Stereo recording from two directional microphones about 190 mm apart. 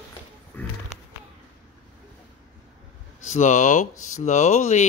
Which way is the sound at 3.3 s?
40° left (ahead or behind).